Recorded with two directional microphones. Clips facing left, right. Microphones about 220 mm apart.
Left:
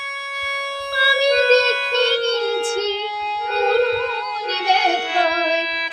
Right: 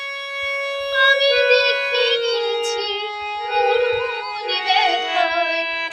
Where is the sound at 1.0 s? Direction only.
55° left (ahead or behind).